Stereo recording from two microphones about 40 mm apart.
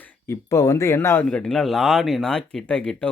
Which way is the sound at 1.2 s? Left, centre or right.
Left.